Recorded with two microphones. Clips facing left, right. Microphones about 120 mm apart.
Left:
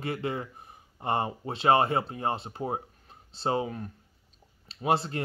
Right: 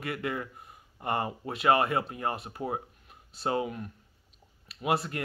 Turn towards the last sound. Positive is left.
turn(degrees=25)  # may be behind; listen again after turning